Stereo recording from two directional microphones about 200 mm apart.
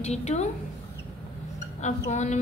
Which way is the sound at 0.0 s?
35° left (ahead or behind).